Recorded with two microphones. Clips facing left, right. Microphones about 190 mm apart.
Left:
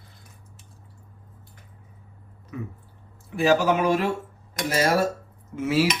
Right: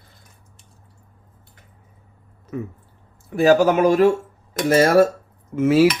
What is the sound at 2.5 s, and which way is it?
Speech, 45° right (ahead or behind).